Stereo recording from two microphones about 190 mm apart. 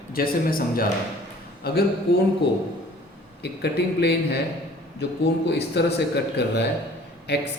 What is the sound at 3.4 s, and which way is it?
Speech, 60° left (ahead or behind).